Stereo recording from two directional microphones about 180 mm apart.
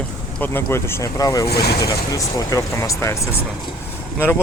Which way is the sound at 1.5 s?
60° left (ahead or behind).